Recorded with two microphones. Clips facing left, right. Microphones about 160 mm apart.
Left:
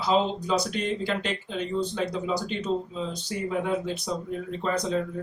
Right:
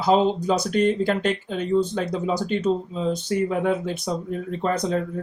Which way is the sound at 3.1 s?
55° right (ahead or behind).